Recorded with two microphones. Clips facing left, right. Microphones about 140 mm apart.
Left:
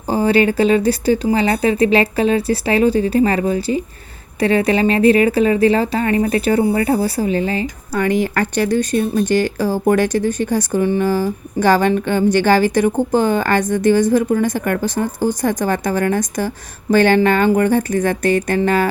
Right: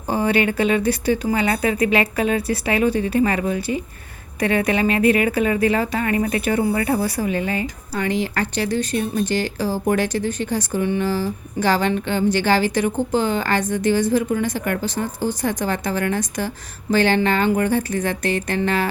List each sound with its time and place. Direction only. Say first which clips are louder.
0.1 s speech: left 5 dB; 30° left (ahead or behind)
7.9 s speech: left 5 dB; 50° left (ahead or behind)